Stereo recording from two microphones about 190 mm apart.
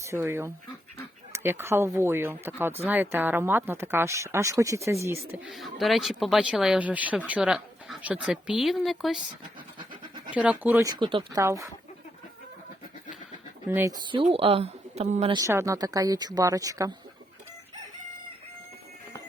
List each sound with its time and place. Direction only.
0.0 s speech: 15° right (ahead or behind)
5.5 s speech: centre (ahead or behind)
10.3 s speech: 5° right (ahead or behind)
13.7 s speech: 15° right (ahead or behind); by 15.4 s 35° right (ahead or behind)
15.4 s speech: 15° right (ahead or behind)